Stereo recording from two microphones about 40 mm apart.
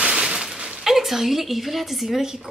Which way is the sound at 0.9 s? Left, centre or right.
Centre.